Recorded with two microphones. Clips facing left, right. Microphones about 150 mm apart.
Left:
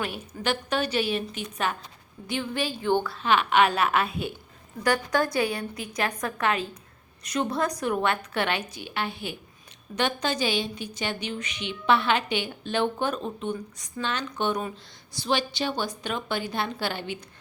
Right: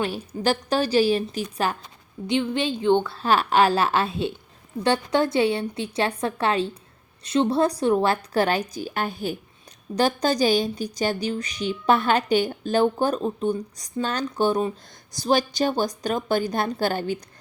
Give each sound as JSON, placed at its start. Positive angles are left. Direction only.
{"t": 0.0, "sound": "a woman's voice", "side_deg": -35}
{"t": 2.2, "sound": "a woman's voice", "side_deg": -20}
{"t": 3.2, "sound": "a woman's voice", "side_deg": -35}